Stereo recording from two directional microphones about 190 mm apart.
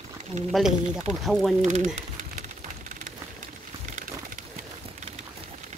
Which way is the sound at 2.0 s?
40° right (ahead or behind).